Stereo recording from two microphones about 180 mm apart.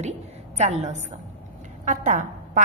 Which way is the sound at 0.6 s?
40° right (ahead or behind).